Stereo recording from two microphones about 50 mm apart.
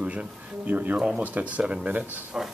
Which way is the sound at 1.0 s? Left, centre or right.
Centre.